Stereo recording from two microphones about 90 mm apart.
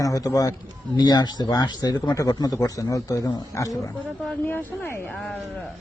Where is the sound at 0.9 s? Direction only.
50° left (ahead or behind).